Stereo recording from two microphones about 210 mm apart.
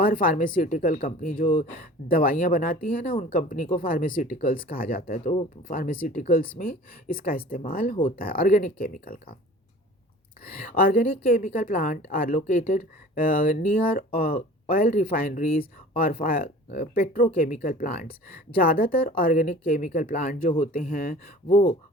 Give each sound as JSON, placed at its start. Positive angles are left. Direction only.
{"t": 0.0, "sound": "a woman's voice", "side_deg": 40}
{"t": 5.3, "sound": "speech", "side_deg": 30}
{"t": 5.7, "sound": "a woman's voice", "side_deg": 45}
{"t": 10.8, "sound": "a woman's voice", "side_deg": 45}